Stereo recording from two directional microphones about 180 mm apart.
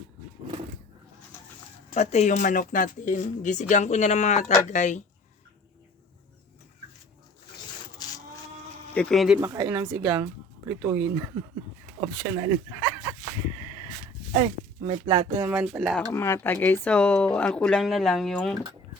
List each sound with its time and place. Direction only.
1.9 s speech: 40° left (ahead or behind)
9.0 s speech: centre (ahead or behind)
9.4 s speech: 15° right (ahead or behind)
14.3 s speech: 30° right (ahead or behind)
15.4 s speech: 5° right (ahead or behind)
16.1 s speech: 15° left (ahead or behind)